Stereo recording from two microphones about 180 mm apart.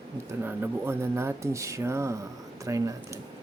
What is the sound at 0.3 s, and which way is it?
Speech, 15° right (ahead or behind).